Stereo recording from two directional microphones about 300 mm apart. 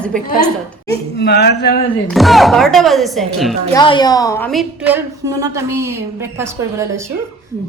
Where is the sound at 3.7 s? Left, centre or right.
Centre.